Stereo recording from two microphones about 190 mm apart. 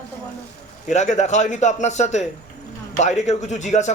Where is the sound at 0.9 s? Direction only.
40° left (ahead or behind).